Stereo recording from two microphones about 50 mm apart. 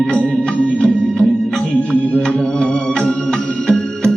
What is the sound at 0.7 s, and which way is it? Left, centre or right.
Music, centre.